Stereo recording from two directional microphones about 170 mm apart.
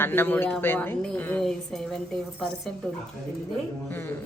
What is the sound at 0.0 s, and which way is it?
A woman's voice, 10° left (ahead or behind).